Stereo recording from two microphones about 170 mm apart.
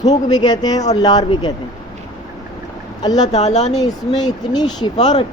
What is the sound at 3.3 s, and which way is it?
Speech, 40° left (ahead or behind).